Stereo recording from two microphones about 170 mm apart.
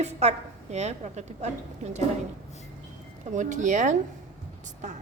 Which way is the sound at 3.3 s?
45° right (ahead or behind).